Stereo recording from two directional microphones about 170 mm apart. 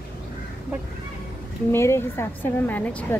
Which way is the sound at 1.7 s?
15° left (ahead or behind).